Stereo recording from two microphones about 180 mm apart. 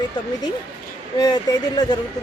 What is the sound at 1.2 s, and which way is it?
Speech, 20° left (ahead or behind).